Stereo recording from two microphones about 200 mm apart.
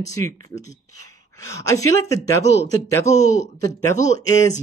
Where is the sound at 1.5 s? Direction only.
15° left (ahead or behind).